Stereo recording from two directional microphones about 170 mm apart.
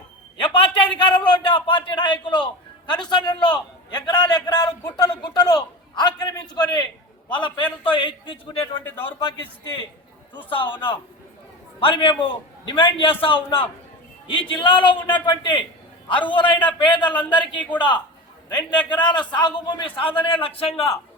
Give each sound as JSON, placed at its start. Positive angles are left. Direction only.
{"t": 0.4, "sound": "a man's voice", "side_deg": 30}